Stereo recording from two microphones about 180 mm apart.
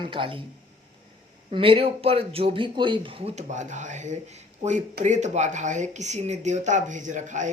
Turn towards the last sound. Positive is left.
turn(degrees=-45)  # may be behind; listen again after turning